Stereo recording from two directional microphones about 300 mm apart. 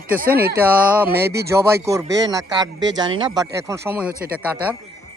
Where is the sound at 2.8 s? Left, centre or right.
Right.